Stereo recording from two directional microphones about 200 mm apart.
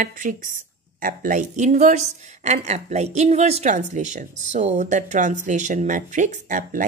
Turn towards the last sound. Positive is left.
turn(degrees=-40)  # may be behind; listen again after turning